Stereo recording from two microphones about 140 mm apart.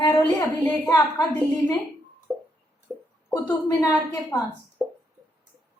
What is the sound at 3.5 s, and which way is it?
Speech, 25° left (ahead or behind).